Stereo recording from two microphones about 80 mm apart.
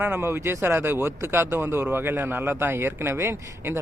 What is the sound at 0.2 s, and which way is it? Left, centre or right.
Speech, right.